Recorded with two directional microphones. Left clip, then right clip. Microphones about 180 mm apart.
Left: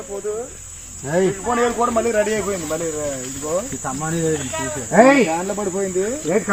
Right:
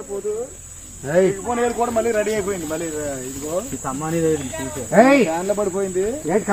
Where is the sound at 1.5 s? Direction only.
50° left (ahead or behind).